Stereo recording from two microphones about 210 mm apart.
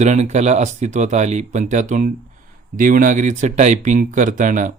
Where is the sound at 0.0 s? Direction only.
35° right (ahead or behind).